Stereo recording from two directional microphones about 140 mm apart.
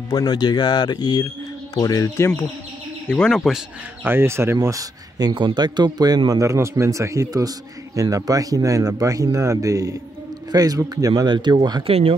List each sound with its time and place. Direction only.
0.1 s speech: 30° left (ahead or behind)
3.1 s speech: 5° left (ahead or behind)
4.0 s speech: 15° right (ahead or behind); by 11.9 s 35° right (ahead or behind)